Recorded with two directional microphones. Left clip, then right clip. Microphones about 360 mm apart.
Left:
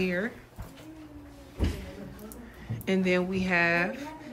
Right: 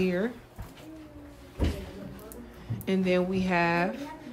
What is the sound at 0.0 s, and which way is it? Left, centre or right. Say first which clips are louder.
Speech: right 1 dB; centre.